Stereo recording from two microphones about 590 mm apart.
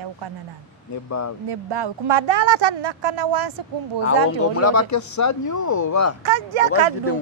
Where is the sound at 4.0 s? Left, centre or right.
Left.